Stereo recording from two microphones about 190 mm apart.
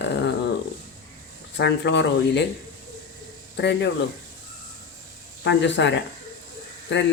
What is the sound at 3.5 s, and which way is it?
Speech, 65° left (ahead or behind).